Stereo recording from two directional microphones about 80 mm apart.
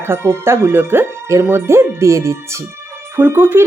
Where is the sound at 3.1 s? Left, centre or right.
Right.